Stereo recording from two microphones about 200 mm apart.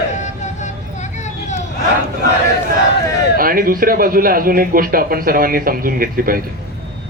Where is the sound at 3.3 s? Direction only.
45° right (ahead or behind).